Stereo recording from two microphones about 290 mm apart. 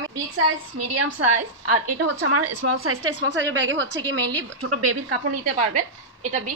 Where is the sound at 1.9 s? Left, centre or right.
Right.